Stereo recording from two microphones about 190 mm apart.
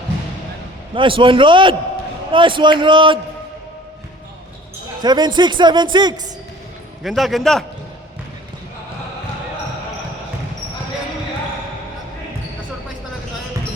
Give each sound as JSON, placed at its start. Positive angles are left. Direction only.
{"t": 0.9, "sound": "a man's voice", "side_deg": -25}
{"t": 5.0, "sound": "a man's voice", "side_deg": -20}
{"t": 7.0, "sound": "a man's voice", "side_deg": 0}